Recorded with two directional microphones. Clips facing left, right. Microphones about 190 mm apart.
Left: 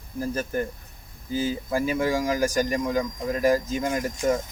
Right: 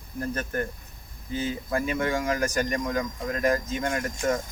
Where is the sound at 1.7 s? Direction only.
5° left (ahead or behind).